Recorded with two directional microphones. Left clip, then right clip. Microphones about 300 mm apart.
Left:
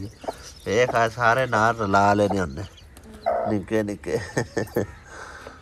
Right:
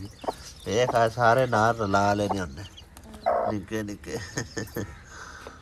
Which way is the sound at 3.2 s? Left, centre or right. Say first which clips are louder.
Left 1 dB; centre.